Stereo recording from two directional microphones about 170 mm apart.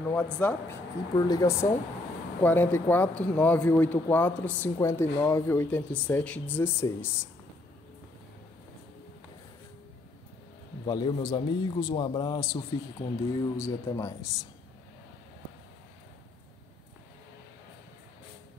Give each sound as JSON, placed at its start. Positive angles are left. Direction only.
{"t": 0.1, "sound": "speech", "side_deg": 10}
{"t": 1.1, "sound": "a man's voice", "side_deg": 20}
{"t": 10.9, "sound": "a man's voice", "side_deg": 25}